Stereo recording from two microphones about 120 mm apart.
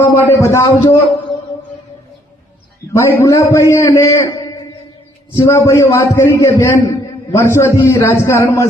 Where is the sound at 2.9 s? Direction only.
25° left (ahead or behind).